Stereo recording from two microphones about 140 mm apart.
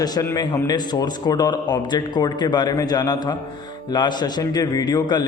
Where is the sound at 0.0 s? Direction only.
30° left (ahead or behind).